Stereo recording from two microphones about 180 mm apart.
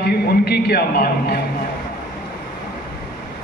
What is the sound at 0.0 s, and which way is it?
A man's voice, 60° left (ahead or behind).